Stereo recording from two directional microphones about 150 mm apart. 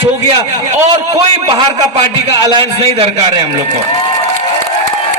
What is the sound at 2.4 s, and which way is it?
Speech, 30° right (ahead or behind).